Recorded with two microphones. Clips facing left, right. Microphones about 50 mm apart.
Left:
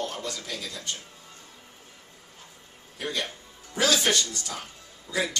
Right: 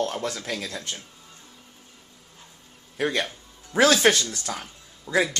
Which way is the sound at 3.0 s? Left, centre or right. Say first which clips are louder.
Right 6 dB; right.